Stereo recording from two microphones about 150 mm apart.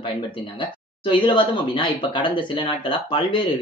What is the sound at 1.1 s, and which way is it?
Speech, 30° left (ahead or behind).